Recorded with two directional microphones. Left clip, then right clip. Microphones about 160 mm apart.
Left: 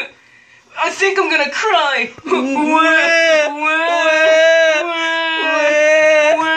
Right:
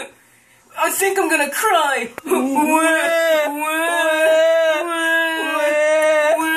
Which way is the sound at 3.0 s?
5° right (ahead or behind).